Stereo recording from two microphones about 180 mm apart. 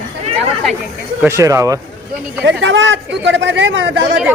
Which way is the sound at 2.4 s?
90° right.